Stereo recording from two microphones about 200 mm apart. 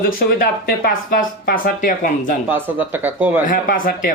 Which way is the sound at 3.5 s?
45° left (ahead or behind).